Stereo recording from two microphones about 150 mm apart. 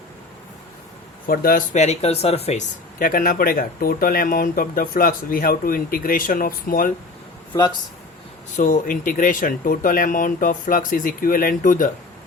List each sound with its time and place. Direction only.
1.3 s speech: 75° left (ahead or behind)
1.7 s speech: 50° left (ahead or behind)
3.0 s speech: 70° left (ahead or behind)
8.5 s speech: 60° left (ahead or behind)